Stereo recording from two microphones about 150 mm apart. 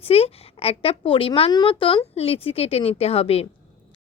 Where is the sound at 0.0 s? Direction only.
40° left (ahead or behind).